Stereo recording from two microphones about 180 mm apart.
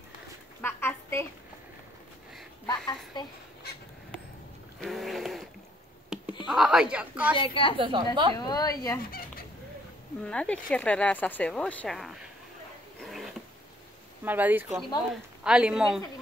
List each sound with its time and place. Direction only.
0.6 s a sound: 10° left (ahead or behind)
2.6 s a child's voice: 25° left (ahead or behind)
4.7 s a sound: centre (ahead or behind)
6.4 s a woman's voice: centre (ahead or behind)
7.3 s a child's voice: 30° left (ahead or behind)
7.7 s a woman's voice: 25° right (ahead or behind)
8.4 s a child's voice: 20° left (ahead or behind)
10.2 s speech: 5° left (ahead or behind)
13.0 s a sound: centre (ahead or behind)
14.2 s a woman's voice: 10° right (ahead or behind)